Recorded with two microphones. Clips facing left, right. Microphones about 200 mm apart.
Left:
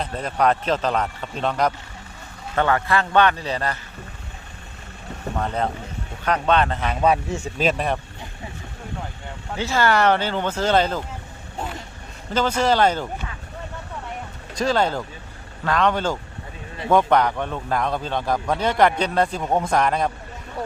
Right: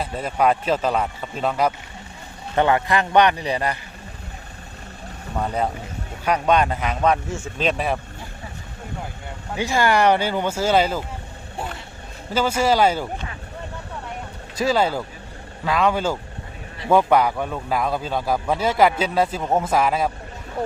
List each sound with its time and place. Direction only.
0.0 s a man's voice: 5° right (ahead or behind)
2.6 s a man's voice: 20° right (ahead or behind)
5.4 s a man's voice: 10° right (ahead or behind)
9.6 s a man's voice: 15° right (ahead or behind)
12.3 s a man's voice: 10° right (ahead or behind)
14.5 s a man's voice: 5° right (ahead or behind)
20.6 s speech: 25° right (ahead or behind)